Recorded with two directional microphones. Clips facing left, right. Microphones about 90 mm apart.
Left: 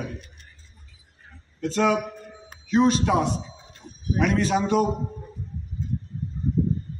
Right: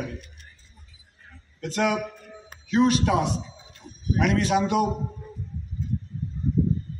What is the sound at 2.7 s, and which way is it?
Speech, 30° left (ahead or behind).